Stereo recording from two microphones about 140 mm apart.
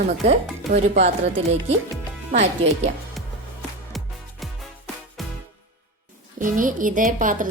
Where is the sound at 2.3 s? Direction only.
55° right (ahead or behind).